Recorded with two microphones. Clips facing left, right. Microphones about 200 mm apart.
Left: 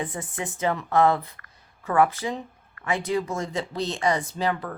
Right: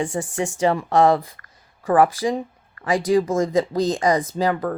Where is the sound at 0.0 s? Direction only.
80° right.